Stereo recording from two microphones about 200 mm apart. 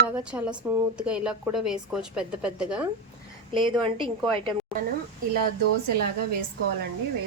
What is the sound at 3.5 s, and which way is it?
Speech, 25° right (ahead or behind).